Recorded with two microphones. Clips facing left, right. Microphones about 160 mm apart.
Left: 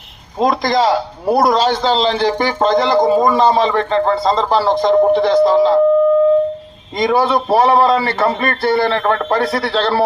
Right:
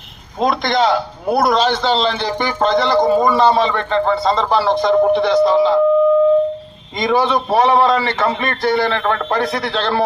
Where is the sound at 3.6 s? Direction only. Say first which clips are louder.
Left 2 dB; 35° left (ahead or behind).